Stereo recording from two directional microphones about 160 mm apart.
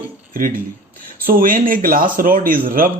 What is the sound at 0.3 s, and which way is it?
Speech, 60° right (ahead or behind).